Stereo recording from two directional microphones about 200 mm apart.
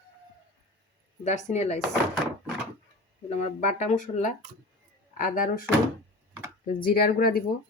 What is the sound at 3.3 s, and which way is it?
Speech, 30° left (ahead or behind).